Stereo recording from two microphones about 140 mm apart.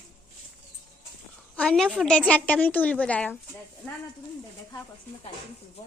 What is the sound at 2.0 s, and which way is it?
A woman's voice, 10° left (ahead or behind).